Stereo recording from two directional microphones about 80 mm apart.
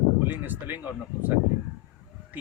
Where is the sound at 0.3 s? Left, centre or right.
Right.